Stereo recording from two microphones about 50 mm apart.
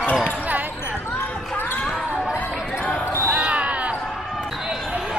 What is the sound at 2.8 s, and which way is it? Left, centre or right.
Basketball bounce, left.